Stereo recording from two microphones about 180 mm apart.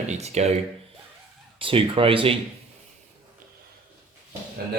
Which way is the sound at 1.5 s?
30° right (ahead or behind).